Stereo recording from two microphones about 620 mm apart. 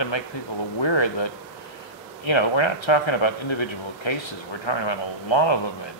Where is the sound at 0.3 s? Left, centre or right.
Left.